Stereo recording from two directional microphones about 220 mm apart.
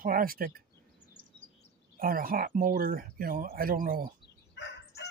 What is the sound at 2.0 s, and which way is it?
Speech, 40° right (ahead or behind).